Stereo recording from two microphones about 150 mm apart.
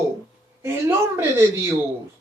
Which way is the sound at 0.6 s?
15° right (ahead or behind).